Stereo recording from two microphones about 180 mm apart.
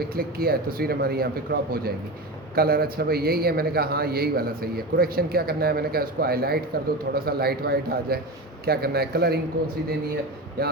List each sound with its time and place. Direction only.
0.1 s a man's voice: 55° right (ahead or behind)
10.6 s a man's voice: 60° right (ahead or behind)